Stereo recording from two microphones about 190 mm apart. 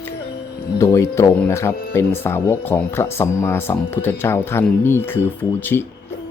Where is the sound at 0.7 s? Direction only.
15° left (ahead or behind).